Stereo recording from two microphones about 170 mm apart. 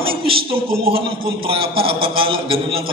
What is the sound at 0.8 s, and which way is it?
A man's voice, 35° right (ahead or behind).